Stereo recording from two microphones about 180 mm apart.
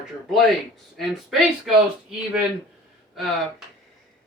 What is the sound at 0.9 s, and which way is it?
Speech, centre (ahead or behind).